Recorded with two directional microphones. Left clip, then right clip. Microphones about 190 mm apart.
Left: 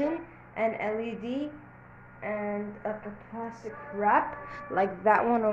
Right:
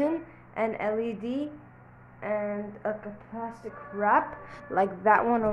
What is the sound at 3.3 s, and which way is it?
Speech, 35° right (ahead or behind).